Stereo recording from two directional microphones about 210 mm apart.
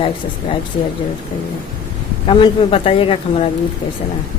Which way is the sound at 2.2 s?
25° left (ahead or behind).